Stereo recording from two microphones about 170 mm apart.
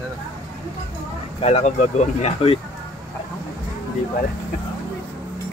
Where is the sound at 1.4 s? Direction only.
40° left (ahead or behind).